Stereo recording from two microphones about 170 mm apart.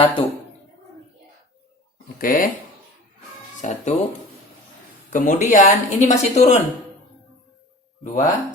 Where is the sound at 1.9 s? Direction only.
55° left (ahead or behind).